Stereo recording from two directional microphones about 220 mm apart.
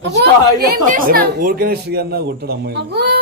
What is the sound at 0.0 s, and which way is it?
Speech, 45° right (ahead or behind).